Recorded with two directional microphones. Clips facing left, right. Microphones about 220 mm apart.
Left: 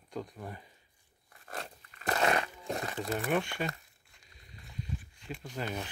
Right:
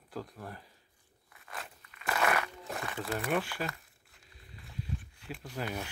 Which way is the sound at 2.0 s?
35° left (ahead or behind).